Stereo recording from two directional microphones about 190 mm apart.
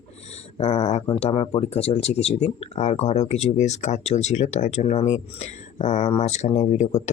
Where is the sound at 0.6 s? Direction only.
35° left (ahead or behind).